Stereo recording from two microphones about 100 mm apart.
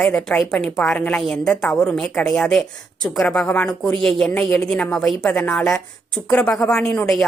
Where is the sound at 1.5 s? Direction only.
15° left (ahead or behind).